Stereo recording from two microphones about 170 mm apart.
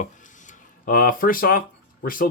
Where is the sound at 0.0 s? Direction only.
50° left (ahead or behind).